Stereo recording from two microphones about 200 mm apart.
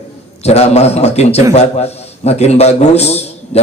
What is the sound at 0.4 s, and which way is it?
A man's voice, 30° left (ahead or behind).